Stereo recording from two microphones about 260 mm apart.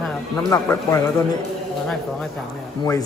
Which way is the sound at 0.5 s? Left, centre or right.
Centre.